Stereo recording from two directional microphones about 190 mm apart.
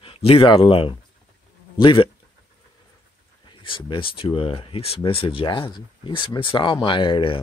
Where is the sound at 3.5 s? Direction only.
25° left (ahead or behind).